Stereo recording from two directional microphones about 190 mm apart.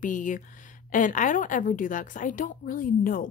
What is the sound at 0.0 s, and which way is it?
A woman's voice, 45° left (ahead or behind).